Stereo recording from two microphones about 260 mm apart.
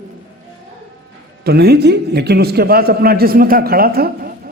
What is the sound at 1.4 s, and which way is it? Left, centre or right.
A man's voice, right.